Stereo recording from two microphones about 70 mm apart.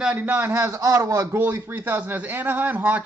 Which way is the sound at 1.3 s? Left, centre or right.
Right.